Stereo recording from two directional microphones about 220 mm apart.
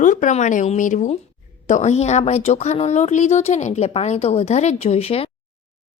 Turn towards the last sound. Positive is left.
turn(degrees=25)  # may be behind; listen again after turning